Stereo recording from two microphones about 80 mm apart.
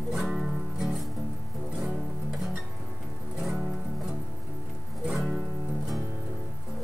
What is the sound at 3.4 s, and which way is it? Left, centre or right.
Music, centre.